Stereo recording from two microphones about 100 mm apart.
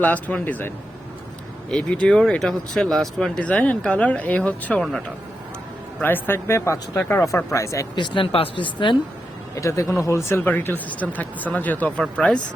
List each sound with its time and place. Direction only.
0.0 s speech: 15° left (ahead or behind)
1.7 s speech: 10° left (ahead or behind)
4.8 s speech: centre (ahead or behind)
6.0 s speech: 20° left (ahead or behind)
7.9 s speech: 55° left (ahead or behind)
9.6 s speech: 30° left (ahead or behind); by 12.4 s 10° left (ahead or behind)